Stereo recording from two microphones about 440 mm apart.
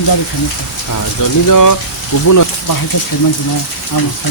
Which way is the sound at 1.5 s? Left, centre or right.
Left.